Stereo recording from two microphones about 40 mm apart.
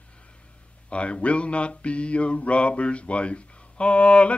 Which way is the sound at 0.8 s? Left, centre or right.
Left.